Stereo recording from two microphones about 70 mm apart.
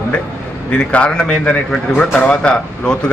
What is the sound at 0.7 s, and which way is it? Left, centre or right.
A man's voice, centre.